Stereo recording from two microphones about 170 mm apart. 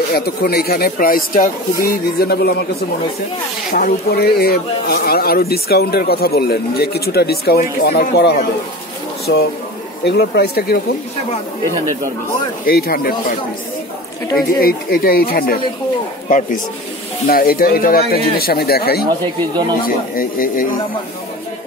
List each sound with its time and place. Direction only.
0.1 s speech: 65° left (ahead or behind)
3.7 s speech: 60° left (ahead or behind)
12.6 s speech: 60° left (ahead or behind)
14.6 s speech: 60° left (ahead or behind)
16.3 s speech: 50° left (ahead or behind)
20.2 s speech: 55° left (ahead or behind)